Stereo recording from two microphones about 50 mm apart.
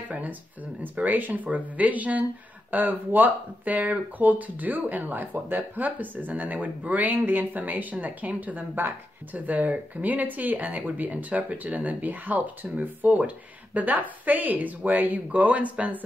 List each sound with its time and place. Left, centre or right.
0.1 s speech: right